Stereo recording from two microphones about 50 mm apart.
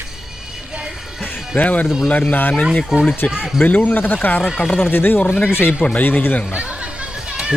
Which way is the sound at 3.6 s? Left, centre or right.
Left.